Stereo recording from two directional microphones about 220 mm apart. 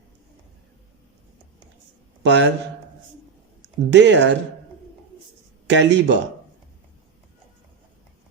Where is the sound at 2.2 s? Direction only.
55° right (ahead or behind).